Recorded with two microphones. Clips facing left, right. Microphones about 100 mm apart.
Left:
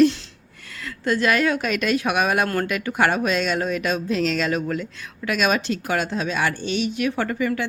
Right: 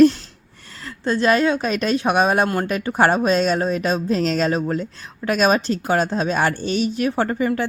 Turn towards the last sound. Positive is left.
turn(degrees=-35)  # may be behind; listen again after turning